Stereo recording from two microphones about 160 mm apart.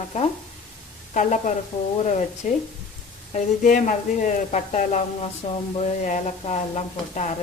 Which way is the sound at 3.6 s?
55° left (ahead or behind).